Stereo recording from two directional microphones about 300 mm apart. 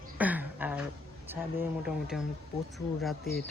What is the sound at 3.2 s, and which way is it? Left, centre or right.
Speech, left.